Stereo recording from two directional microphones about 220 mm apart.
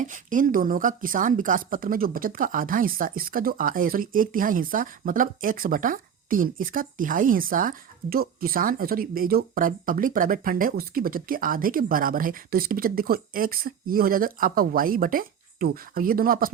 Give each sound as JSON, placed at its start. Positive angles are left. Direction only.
{"t": 0.0, "sound": "speech", "side_deg": -35}